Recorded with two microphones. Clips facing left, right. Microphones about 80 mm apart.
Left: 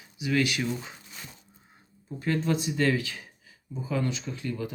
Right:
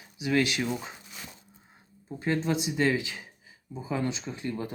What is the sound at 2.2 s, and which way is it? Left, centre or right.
Speech, right.